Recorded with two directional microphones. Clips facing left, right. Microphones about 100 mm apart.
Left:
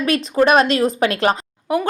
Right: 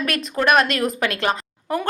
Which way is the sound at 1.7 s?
15° left (ahead or behind).